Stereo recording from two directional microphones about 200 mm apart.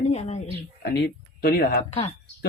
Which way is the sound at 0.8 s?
55° left (ahead or behind).